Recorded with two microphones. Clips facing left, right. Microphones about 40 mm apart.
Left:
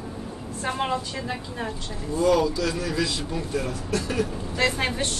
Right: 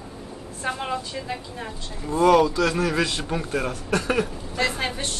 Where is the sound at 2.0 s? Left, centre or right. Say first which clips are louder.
Right 4 dB; right.